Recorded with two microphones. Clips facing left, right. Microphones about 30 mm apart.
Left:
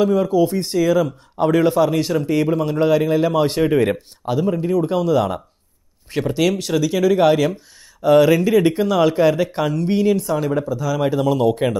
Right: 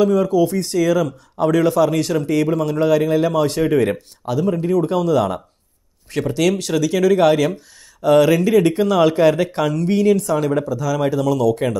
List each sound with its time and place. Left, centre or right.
0.0 s speech: centre
0.7 s speech: centre
1.4 s speech: left
1.8 s speech: centre
4.5 s speech: centre
9.8 s speech: centre
10.2 s speech: centre
10.7 s speech: centre
11.1 s speech: left